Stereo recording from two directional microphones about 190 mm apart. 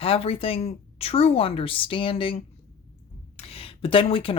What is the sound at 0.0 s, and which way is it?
Speech, 30° left (ahead or behind).